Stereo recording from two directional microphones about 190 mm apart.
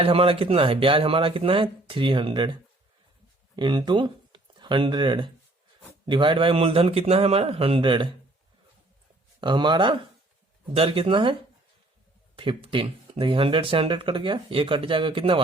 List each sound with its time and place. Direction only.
0.0 s speech: 30° right (ahead or behind)
9.4 s speech: 25° right (ahead or behind)
12.4 s speech: 25° right (ahead or behind)